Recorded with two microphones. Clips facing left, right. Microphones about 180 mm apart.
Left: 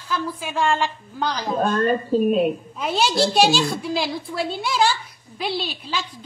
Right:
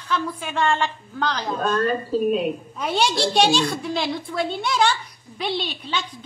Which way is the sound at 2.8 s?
5° left (ahead or behind).